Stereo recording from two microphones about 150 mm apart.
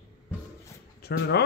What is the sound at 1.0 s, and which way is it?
Bird, 90° left.